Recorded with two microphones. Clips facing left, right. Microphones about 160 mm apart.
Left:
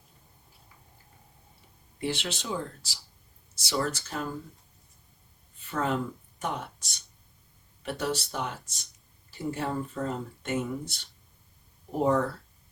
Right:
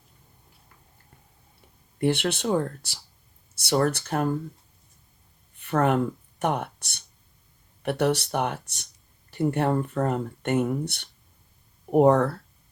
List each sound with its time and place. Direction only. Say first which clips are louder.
2.0 s speech: right 8 dB; 60° right (ahead or behind)
5.5 s speech: right 7 dB; 65° right (ahead or behind)